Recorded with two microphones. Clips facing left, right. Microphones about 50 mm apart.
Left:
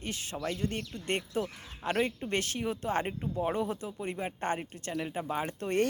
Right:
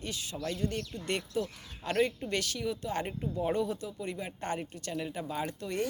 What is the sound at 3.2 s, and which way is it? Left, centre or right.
Speech, centre.